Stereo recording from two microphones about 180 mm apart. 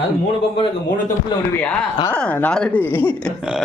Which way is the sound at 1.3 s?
25° left (ahead or behind).